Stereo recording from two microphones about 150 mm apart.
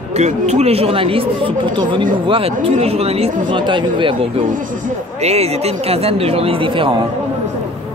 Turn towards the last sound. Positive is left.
turn(degrees=-35)  # may be behind; listen again after turning